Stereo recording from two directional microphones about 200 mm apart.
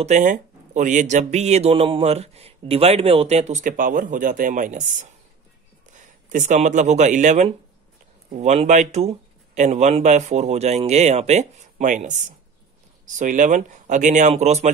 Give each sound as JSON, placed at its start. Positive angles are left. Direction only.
{"t": 0.0, "sound": "speech", "side_deg": -40}